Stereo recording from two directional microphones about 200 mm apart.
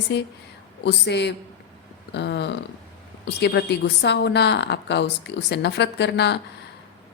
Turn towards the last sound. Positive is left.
turn(degrees=60)  # may be behind; listen again after turning